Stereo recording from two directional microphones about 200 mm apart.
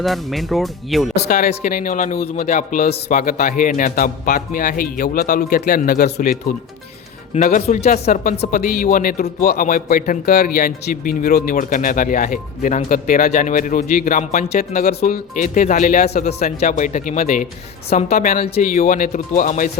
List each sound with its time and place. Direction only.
0.0 s speech: centre (ahead or behind)
1.1 s speech: 55° left (ahead or behind)
7.3 s speech: 40° left (ahead or behind)
18.4 s speech: 35° left (ahead or behind)